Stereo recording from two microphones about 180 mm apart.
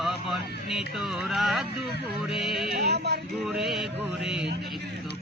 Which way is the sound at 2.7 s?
65° right (ahead or behind).